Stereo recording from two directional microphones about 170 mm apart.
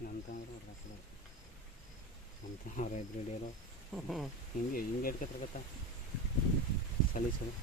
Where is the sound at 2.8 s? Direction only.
55° left (ahead or behind).